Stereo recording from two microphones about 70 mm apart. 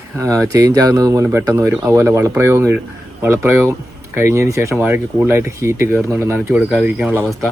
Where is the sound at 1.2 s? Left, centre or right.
Right.